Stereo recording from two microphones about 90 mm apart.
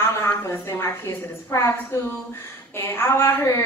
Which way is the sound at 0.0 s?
30° left (ahead or behind).